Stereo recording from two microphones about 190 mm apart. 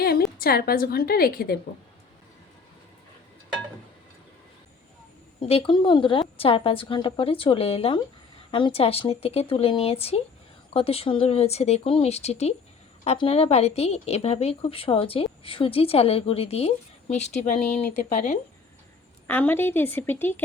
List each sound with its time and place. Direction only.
0.0 s a woman's voice: 55° left (ahead or behind)
5.4 s a woman's voice: 30° left (ahead or behind)
19.3 s a woman's voice: 10° left (ahead or behind)